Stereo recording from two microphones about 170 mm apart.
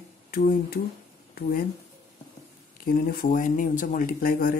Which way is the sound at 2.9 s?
60° left (ahead or behind).